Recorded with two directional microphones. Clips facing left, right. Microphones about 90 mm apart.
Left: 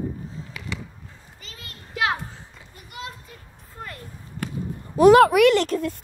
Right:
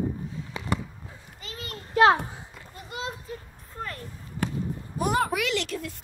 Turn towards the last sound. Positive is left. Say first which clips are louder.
# left 8 dB
turn(degrees=45)  # may be behind; listen again after turning